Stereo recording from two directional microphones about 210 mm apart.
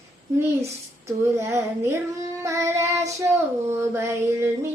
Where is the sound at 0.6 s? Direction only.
15° right (ahead or behind).